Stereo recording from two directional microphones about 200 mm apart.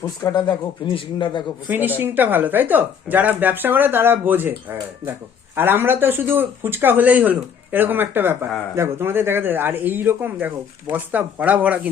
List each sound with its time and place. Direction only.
0.2 s a man's voice: 20° left (ahead or behind)
1.6 s a man's voice: 10° right (ahead or behind)